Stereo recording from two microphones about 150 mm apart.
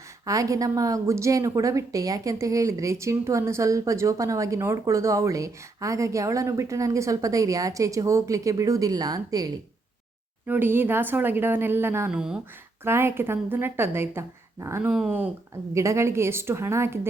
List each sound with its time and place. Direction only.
0.3 s a woman's voice: 20° right (ahead or behind)
10.4 s speech: 15° right (ahead or behind)
14.8 s speech: 5° right (ahead or behind)
15.7 s speech: 20° right (ahead or behind)